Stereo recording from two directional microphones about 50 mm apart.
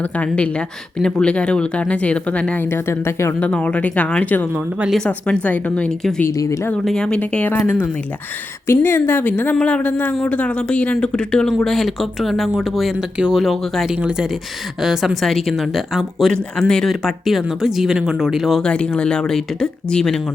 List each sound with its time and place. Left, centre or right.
0.9 s a woman's voice: centre; by 4.4 s left
5.0 s speech: left
6.9 s speech: centre
7.2 s a woman's voice: left
8.6 s speech: left
9.6 s speech: left
11.0 s speech: centre
11.4 s speech: centre
14.8 s speech: centre
16.2 s speech: centre
17.2 s speech: centre
18.6 s speech: left